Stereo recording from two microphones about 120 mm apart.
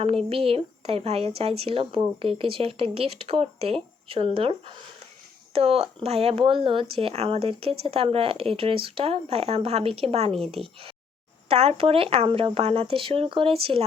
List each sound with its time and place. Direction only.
0.0 s speech: 55° right (ahead or behind)